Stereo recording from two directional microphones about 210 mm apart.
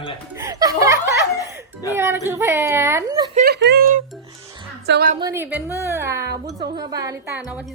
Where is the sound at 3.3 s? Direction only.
50° right (ahead or behind).